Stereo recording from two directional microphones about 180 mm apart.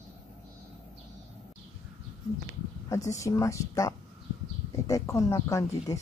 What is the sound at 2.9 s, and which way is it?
Speech, 15° left (ahead or behind).